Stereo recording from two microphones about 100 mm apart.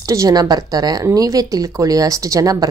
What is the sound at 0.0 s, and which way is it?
Speech, 35° right (ahead or behind).